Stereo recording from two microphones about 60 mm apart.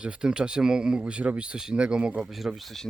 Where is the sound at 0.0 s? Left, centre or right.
Centre.